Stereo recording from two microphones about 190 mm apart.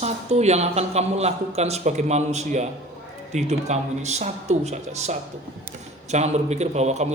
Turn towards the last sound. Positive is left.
turn(degrees=-35)  # may be behind; listen again after turning